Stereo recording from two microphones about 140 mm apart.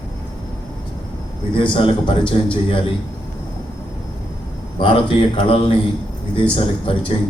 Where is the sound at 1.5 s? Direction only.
40° left (ahead or behind).